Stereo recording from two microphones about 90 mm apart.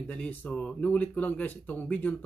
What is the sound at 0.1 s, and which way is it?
Speech, 15° left (ahead or behind).